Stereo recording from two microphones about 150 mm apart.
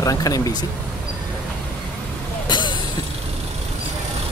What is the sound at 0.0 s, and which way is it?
Speech, 25° left (ahead or behind).